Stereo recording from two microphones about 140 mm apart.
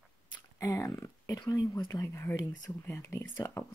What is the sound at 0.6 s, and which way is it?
Speech, 20° left (ahead or behind).